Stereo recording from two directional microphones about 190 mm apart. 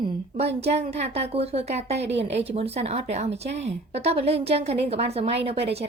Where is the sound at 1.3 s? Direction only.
35° right (ahead or behind).